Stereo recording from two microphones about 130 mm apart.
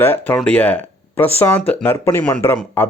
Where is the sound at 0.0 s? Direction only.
15° left (ahead or behind).